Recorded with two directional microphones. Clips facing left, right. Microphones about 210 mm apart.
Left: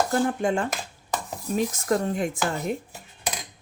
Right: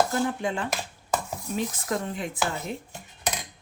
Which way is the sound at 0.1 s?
45° left (ahead or behind).